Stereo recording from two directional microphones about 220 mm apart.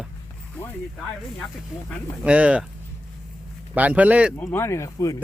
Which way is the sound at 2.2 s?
5° right (ahead or behind).